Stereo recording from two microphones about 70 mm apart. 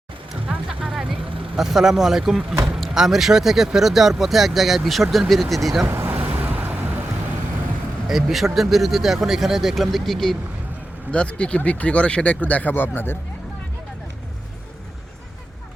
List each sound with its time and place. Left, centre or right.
0.7 s vehicle: centre
1.5 s speech: centre
5.8 s vehicle: right
8.0 s speech: centre
11.1 s speech: centre